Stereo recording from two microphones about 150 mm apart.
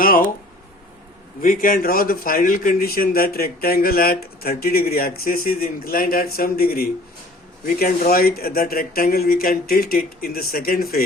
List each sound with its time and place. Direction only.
0.0 s a man's voice: 70° left (ahead or behind)
1.4 s a man's voice: 65° left (ahead or behind); by 11.0 s 90° left